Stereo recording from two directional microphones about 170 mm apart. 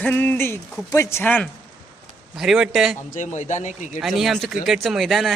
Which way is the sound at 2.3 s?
Centre (ahead or behind).